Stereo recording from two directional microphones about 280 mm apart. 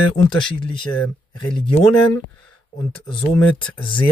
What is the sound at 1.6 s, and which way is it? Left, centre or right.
Speech, centre.